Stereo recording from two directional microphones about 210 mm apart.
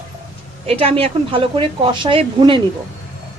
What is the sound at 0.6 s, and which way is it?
A woman's voice, 30° right (ahead or behind).